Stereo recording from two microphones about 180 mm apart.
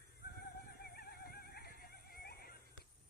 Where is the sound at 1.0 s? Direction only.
60° left (ahead or behind).